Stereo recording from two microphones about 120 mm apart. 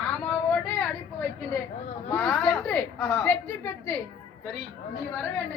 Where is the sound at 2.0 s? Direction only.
10° left (ahead or behind).